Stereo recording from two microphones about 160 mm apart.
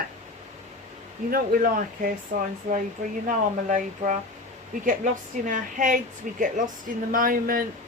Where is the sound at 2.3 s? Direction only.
50° right (ahead or behind).